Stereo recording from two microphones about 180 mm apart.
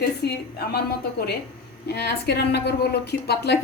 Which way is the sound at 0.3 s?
60° left (ahead or behind).